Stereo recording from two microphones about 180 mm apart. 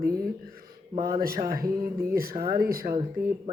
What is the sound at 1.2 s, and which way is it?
Speech, 55° right (ahead or behind).